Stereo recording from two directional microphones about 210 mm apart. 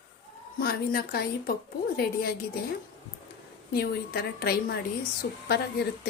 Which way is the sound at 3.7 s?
45° left (ahead or behind).